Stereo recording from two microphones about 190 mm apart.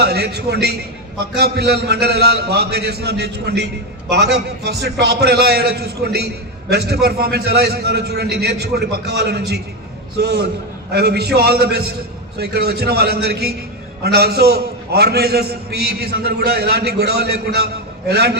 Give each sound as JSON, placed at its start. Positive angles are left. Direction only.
{"t": 0.0, "sound": "a man's voice", "side_deg": -60}